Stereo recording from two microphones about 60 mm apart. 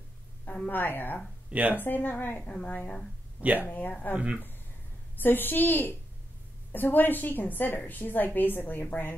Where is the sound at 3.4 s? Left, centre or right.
Right.